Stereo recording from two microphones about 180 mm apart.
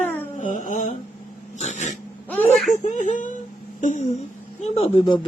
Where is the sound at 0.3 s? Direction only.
45° left (ahead or behind).